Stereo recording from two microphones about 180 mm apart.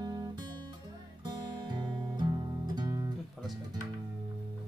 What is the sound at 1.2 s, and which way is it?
Music, 25° right (ahead or behind).